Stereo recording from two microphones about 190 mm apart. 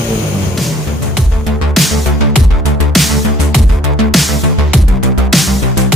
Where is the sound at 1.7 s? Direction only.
Centre (ahead or behind).